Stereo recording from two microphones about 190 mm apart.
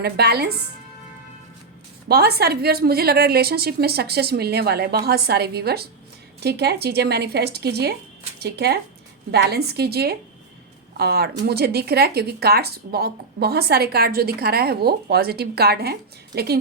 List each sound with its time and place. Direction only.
0.0 s speech: 55° right (ahead or behind)
2.0 s speech: 55° right (ahead or behind)